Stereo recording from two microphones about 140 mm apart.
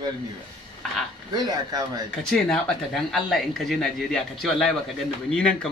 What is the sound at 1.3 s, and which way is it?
Speech, 30° right (ahead or behind).